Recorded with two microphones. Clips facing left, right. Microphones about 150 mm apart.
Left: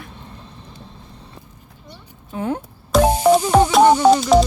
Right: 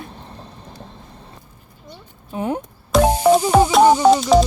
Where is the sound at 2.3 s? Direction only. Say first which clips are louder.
Right 1 dB; 15° right (ahead or behind).